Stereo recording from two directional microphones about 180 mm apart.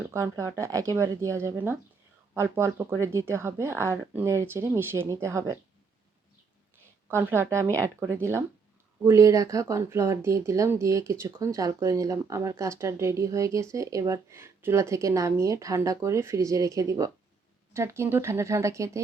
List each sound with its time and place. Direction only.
0.1 s speech: 15° right (ahead or behind)
7.1 s speech: 15° right (ahead or behind)